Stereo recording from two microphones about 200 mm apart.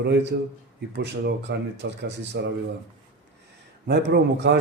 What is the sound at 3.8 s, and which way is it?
Speech, 60° right (ahead or behind).